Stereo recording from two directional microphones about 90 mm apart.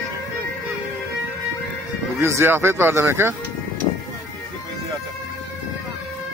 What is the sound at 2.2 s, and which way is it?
Speech, 30° right (ahead or behind).